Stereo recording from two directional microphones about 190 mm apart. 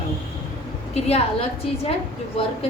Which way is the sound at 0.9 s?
30° left (ahead or behind).